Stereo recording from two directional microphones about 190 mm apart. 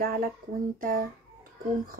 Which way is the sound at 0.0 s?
50° right (ahead or behind).